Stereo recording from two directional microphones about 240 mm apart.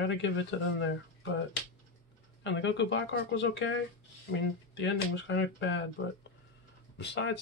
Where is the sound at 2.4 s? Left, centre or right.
Left.